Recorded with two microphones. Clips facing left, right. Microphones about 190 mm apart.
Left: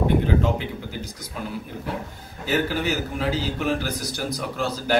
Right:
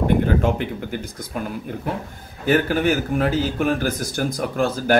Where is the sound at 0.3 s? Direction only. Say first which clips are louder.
Right 2 dB; 55° right (ahead or behind).